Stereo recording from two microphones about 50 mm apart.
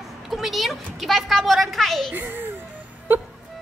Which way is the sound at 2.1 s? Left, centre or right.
Right.